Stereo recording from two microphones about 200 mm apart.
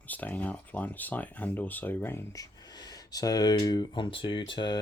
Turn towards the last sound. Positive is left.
turn(degrees=25)  # may be behind; listen again after turning